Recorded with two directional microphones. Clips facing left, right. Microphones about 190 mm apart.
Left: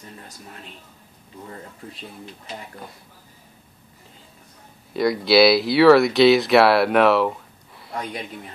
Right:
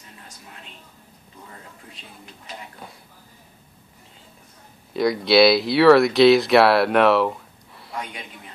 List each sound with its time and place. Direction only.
4.9 s speech: centre (ahead or behind)